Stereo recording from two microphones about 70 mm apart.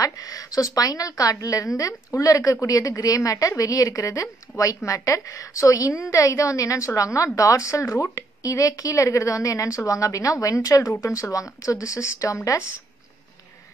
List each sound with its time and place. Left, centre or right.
0.0 s a woman's voice: left